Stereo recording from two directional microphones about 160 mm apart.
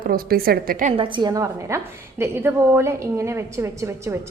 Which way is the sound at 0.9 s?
30° right (ahead or behind).